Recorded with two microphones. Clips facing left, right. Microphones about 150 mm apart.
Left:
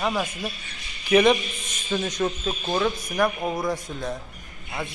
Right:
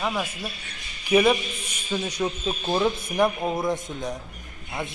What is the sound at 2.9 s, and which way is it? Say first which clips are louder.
Speech: right 1 dB; 25° right (ahead or behind).